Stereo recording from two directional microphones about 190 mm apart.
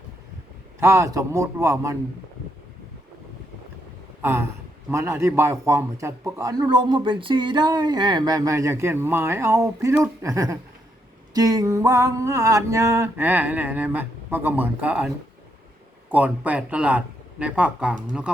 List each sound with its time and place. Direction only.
0.8 s a man's voice: 15° right (ahead or behind)
4.2 s a man's voice: 10° right (ahead or behind)